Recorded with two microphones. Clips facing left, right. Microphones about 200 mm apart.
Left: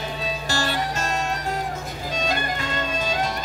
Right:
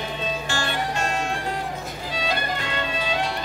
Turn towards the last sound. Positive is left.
turn(degrees=45)  # may be behind; listen again after turning